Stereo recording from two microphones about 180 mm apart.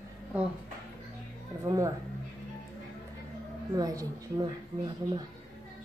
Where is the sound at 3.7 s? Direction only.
20° right (ahead or behind).